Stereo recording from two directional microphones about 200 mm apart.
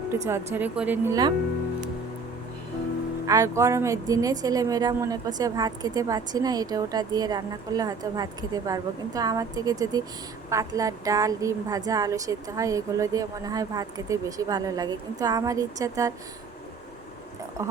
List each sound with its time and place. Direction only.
0.1 s a woman's voice: 15° right (ahead or behind)
3.2 s a woman's voice: 15° right (ahead or behind)
17.6 s speech: 15° right (ahead or behind)